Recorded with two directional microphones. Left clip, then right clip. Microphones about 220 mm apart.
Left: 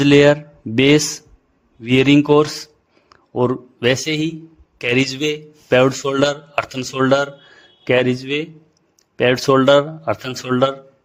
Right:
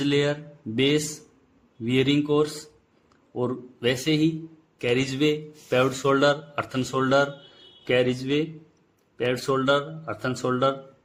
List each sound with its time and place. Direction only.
0.0 s speech: 40° left (ahead or behind)